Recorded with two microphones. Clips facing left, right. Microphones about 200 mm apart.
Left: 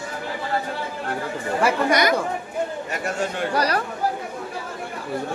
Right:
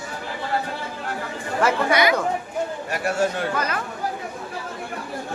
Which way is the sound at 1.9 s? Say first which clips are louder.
Right 1 dB; 45° left (ahead or behind).